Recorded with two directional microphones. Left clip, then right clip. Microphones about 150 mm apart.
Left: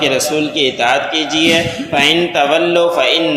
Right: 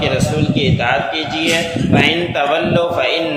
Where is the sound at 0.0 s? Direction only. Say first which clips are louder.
Left 3 dB; 35° left (ahead or behind).